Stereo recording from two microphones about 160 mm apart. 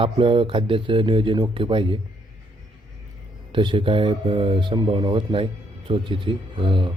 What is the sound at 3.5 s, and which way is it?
Speech, 30° right (ahead or behind).